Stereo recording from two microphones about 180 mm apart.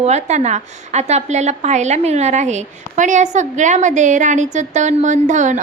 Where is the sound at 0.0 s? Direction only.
40° right (ahead or behind).